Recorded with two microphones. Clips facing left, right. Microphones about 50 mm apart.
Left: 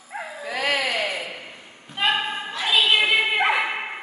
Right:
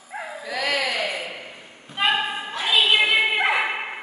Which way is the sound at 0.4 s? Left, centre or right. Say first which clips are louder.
Left 1 dB; left.